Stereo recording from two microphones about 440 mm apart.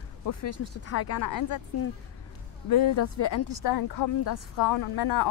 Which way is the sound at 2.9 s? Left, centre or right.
Left.